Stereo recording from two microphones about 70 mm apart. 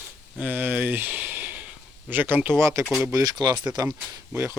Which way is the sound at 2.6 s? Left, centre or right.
Right.